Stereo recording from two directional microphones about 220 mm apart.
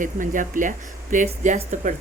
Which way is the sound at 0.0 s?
35° right (ahead or behind).